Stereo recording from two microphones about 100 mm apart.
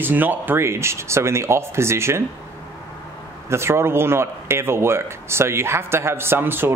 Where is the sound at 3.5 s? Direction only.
25° right (ahead or behind).